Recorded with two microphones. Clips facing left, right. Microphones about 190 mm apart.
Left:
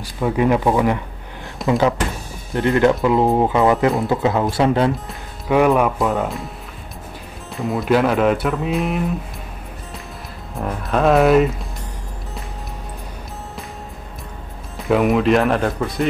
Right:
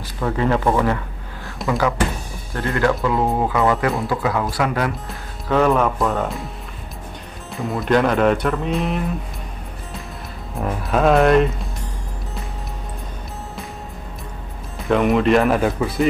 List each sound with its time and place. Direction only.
0.0 s speech: 15° left (ahead or behind)
5.5 s speech: 15° left (ahead or behind)
7.5 s speech: centre (ahead or behind)
10.5 s speech: centre (ahead or behind)
14.9 s speech: centre (ahead or behind)